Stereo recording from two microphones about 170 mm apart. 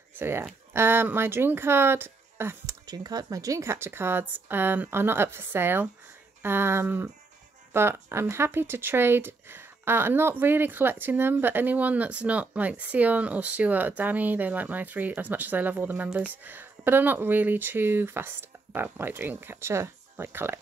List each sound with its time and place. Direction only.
0.2 s speech: 15° right (ahead or behind)